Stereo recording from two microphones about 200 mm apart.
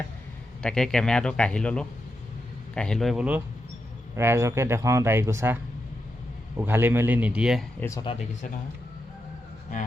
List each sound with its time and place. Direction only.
0.6 s speech: 5° left (ahead or behind); by 5.5 s 15° right (ahead or behind)
6.6 s speech: 10° right (ahead or behind)
7.8 s speech: 15° left (ahead or behind)
8.1 s speech: 35° left (ahead or behind)